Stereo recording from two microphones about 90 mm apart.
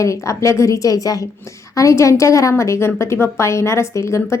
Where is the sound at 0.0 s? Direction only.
35° left (ahead or behind).